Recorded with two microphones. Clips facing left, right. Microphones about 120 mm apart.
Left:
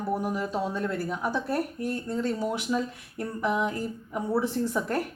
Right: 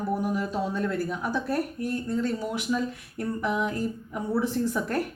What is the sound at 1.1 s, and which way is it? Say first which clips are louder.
Speech: even; 25° left (ahead or behind).